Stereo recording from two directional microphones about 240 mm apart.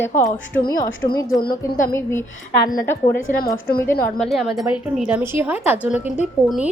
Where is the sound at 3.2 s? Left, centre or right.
Left.